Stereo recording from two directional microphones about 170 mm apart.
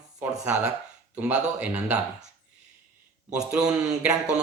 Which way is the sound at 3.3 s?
5° right (ahead or behind).